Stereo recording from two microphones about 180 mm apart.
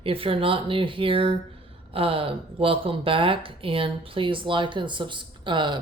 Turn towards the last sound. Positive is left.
turn(degrees=-25)  # may be behind; listen again after turning